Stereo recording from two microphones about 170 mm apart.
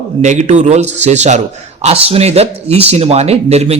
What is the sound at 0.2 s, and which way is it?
A man's voice, 45° right (ahead or behind).